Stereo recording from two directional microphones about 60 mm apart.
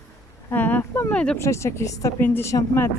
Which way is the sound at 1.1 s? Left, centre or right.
Centre.